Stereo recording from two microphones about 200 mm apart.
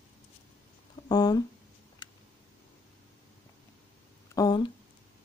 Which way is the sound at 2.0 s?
20° left (ahead or behind).